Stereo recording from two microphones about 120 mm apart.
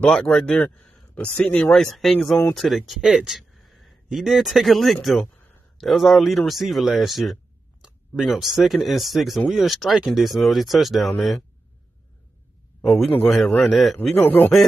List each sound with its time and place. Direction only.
0.0 s speech: 10° left (ahead or behind)
12.8 s speech: centre (ahead or behind)
14.1 s speech: 15° left (ahead or behind)